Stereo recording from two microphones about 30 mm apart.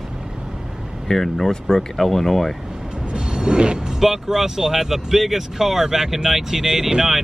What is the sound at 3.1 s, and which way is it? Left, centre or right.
Music, right.